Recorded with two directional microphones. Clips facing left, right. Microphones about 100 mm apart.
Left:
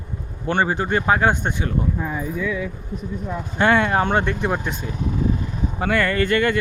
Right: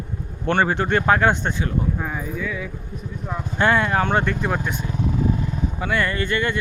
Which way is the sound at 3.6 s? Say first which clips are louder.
Left 1 dB; 25° left (ahead or behind).